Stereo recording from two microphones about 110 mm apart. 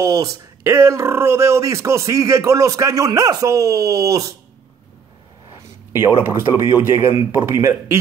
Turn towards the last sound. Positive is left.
turn(degrees=-25)  # may be behind; listen again after turning